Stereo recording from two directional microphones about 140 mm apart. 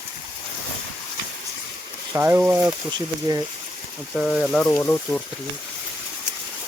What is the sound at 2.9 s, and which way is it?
Speech, 30° right (ahead or behind).